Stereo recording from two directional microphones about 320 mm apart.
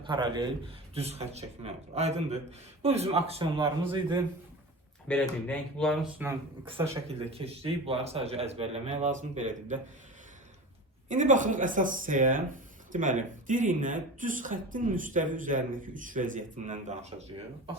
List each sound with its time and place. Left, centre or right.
0.0 s a man's voice: centre
5.0 s speech: centre
6.7 s speech: centre
11.1 s speech: right